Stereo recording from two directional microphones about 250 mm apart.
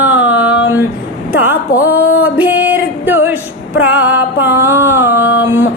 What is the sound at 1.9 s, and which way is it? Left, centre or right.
Music, left.